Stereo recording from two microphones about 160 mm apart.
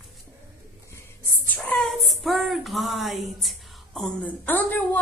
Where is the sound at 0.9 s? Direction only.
15° left (ahead or behind).